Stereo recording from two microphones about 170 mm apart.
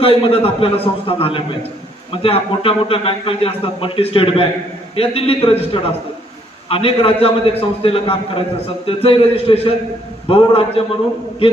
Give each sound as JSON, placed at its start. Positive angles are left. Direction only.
{"t": 0.0, "sound": "a man's voice", "side_deg": 35}